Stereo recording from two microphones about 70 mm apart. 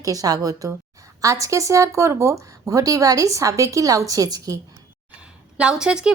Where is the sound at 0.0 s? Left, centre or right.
Right.